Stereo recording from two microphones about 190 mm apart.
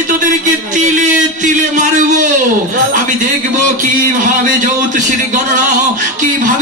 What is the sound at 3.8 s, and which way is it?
A man's voice, 45° right (ahead or behind).